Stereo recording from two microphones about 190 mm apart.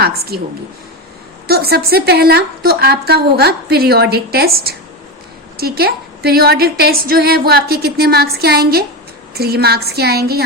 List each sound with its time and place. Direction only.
0.0 s a woman's voice: 55° right (ahead or behind)
1.5 s a woman's voice: 55° right (ahead or behind)